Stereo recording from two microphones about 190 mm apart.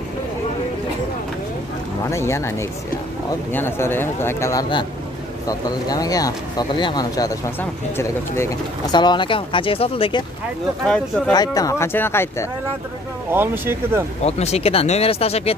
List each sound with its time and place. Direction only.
2.0 s a man's voice: 15° left (ahead or behind)
3.5 s a man's voice: 10° left (ahead or behind); by 10.2 s 30° left (ahead or behind)
11.3 s a man's voice: 20° left (ahead or behind)
13.3 s speech: 10° right (ahead or behind)
14.2 s speech: 35° left (ahead or behind)